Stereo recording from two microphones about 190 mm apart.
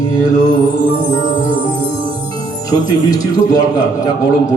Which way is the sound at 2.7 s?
20° left (ahead or behind).